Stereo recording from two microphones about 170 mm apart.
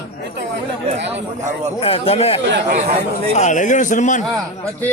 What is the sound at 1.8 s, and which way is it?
Speech, 35° left (ahead or behind).